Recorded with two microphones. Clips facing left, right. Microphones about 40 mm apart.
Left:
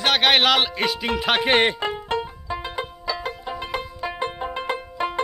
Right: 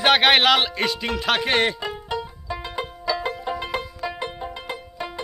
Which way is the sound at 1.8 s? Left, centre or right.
Left.